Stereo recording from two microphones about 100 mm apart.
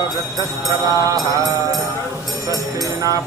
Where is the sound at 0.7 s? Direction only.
35° right (ahead or behind).